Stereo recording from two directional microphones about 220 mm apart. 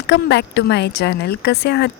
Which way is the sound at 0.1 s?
50° left (ahead or behind).